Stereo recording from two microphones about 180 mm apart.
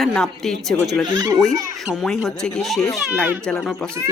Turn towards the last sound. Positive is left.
turn(degrees=0)  # may be behind; listen again after turning